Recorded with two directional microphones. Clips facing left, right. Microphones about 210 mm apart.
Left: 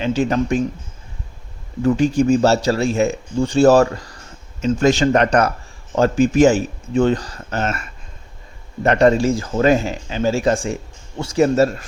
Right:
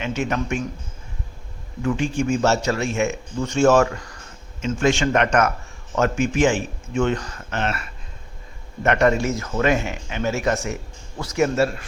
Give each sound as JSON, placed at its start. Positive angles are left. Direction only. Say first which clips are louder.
{"t": 0.0, "sound": "a man's voice", "louder": "left 6 dB", "side_deg": 35}
{"t": 1.8, "sound": "a man's voice", "louder": "left 7 dB", "side_deg": 40}
{"t": 8.8, "sound": "a man's voice", "louder": "left 4 dB", "side_deg": 30}